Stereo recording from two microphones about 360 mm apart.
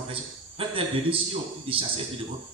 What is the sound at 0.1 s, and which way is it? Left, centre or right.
A man's voice, centre.